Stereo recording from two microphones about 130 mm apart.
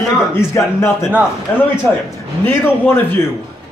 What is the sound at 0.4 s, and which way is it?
Speech, 20° left (ahead or behind).